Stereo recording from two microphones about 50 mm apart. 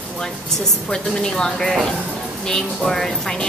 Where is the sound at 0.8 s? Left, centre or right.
Centre.